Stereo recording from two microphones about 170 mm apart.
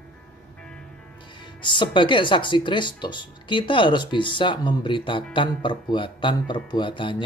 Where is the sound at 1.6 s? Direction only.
30° left (ahead or behind).